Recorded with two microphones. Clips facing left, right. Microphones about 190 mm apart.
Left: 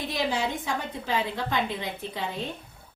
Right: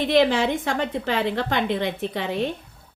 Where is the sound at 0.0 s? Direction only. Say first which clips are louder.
Right 9 dB; 90° right; by 2.5 s 70° right (ahead or behind).